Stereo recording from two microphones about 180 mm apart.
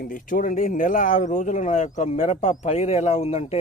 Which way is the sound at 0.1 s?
45° left (ahead or behind).